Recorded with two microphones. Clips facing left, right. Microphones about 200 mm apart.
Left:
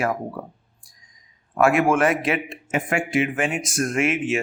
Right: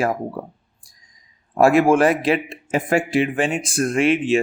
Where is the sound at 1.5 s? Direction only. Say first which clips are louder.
Right 4 dB; 35° right (ahead or behind).